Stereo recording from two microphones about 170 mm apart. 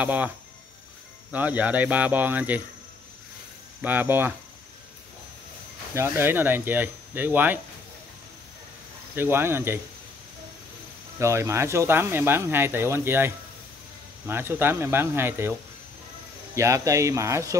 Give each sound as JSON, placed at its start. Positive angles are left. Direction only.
{"t": 0.0, "sound": "speech", "side_deg": -10}
{"t": 1.3, "sound": "speech", "side_deg": -10}
{"t": 3.8, "sound": "speech", "side_deg": -10}
{"t": 5.9, "sound": "speech", "side_deg": -15}
{"t": 9.1, "sound": "speech", "side_deg": -15}
{"t": 11.1, "sound": "speech", "side_deg": -15}
{"t": 16.5, "sound": "speech", "side_deg": -15}